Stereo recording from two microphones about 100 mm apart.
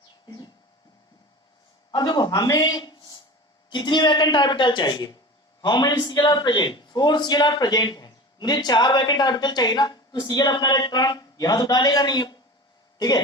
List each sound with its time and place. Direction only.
1.9 s a man's voice: 45° left (ahead or behind)